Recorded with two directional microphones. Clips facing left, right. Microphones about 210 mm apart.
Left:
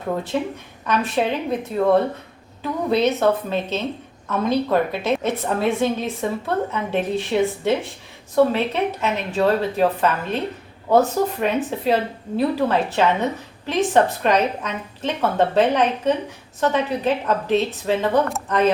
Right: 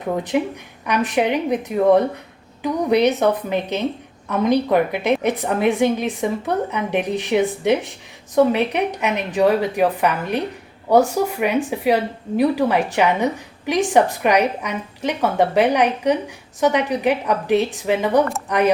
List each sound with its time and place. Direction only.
0.0 s a woman's voice: 15° right (ahead or behind)